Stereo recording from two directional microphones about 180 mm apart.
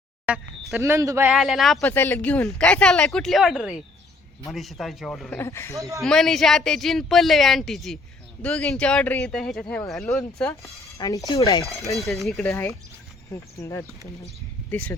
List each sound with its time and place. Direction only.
0.3 s speech: 5° right (ahead or behind)
1.3 s speech: centre (ahead or behind)
1.8 s speech: 10° left (ahead or behind)
5.4 s speech: 15° left (ahead or behind)
6.0 s speech: centre (ahead or behind)
10.9 s speech: 20° left (ahead or behind)
11.9 s speech: centre (ahead or behind)
12.4 s speech: 15° left (ahead or behind)